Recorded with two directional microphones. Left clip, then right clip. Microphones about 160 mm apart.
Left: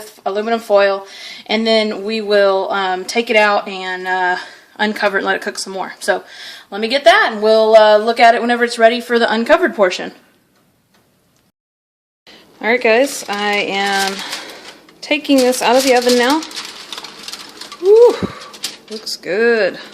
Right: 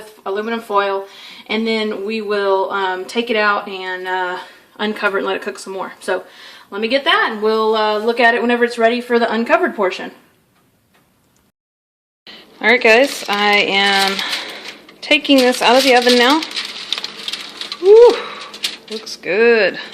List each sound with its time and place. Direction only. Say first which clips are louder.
0.3 s speech: left 5 dB; 60° left (ahead or behind)
6.7 s speech: left 4 dB; 65° left (ahead or behind)
12.2 s speech: right 4 dB; 5° left (ahead or behind)
17.8 s a sound: right 1 dB; 5° left (ahead or behind)
19.0 s speech: right 1 dB; 15° left (ahead or behind)